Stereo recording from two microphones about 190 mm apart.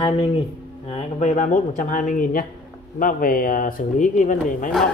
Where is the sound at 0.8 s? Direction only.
35° left (ahead or behind).